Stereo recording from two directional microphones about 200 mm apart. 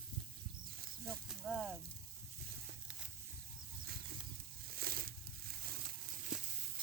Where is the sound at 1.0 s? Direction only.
5° right (ahead or behind).